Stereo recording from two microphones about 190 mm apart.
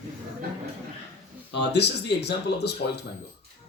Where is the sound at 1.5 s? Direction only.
65° left (ahead or behind).